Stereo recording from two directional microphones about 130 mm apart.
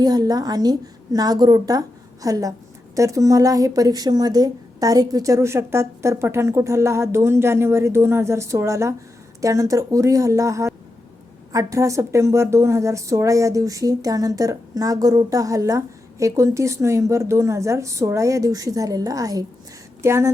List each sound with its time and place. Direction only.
0.0 s a woman's voice: 30° right (ahead or behind)